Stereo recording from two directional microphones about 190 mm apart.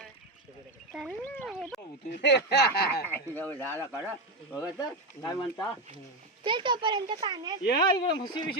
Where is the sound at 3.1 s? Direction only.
10° left (ahead or behind).